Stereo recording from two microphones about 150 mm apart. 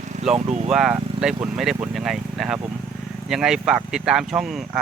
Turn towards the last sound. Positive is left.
turn(degrees=0)  # may be behind; listen again after turning